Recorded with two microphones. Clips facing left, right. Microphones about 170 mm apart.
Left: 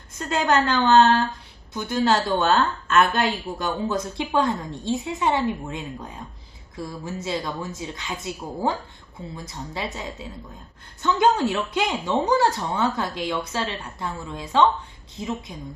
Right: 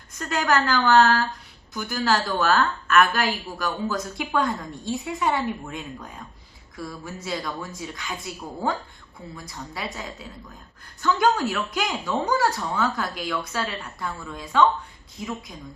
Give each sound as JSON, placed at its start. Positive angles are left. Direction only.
{"t": 0.2, "sound": "a woman's voice", "side_deg": 25}